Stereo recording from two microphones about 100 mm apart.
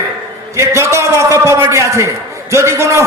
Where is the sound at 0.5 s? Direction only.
30° right (ahead or behind).